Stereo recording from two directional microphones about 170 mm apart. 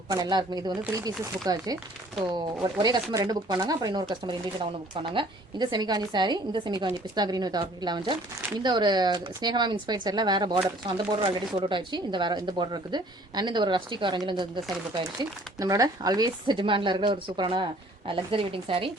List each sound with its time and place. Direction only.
0.1 s speech: 25° right (ahead or behind)